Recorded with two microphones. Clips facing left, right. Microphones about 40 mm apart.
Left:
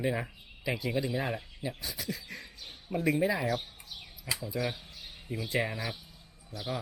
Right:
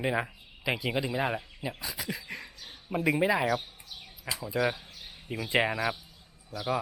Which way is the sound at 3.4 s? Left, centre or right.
Right.